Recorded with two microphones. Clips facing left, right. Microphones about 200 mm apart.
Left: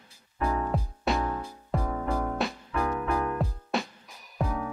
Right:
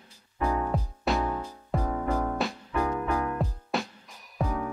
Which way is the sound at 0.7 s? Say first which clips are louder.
Even; centre (ahead or behind).